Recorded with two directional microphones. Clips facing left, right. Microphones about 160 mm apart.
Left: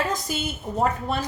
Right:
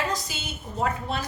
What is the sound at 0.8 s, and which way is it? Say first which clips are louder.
Speech: left 3 dB; 50° left (ahead or behind).